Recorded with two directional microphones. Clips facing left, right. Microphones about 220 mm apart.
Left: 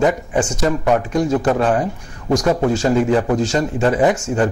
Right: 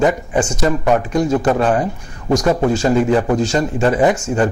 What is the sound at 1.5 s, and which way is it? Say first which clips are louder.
A man's voice: right 1 dB; 20° right (ahead or behind).